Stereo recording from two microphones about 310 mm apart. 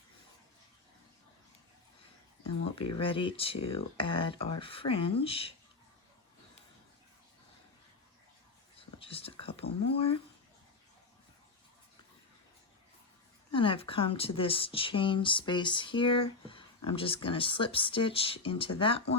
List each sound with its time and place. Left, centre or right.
2.9 s speech: centre
9.0 s speech: centre
13.5 s speech: centre